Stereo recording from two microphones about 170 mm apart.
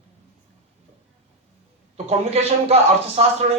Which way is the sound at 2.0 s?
40° right (ahead or behind).